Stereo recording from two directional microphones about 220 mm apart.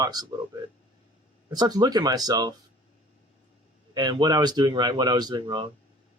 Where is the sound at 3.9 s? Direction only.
20° right (ahead or behind).